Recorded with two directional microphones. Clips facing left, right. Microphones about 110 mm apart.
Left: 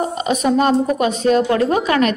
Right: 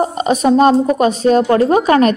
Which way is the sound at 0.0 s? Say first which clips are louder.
Right 4 dB; 40° right (ahead or behind).